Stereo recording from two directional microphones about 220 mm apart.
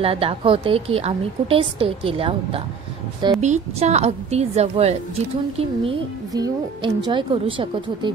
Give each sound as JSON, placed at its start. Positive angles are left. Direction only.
{"t": 0.0, "sound": "a woman's voice", "side_deg": -25}